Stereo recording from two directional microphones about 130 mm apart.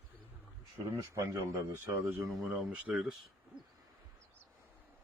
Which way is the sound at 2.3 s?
Centre (ahead or behind).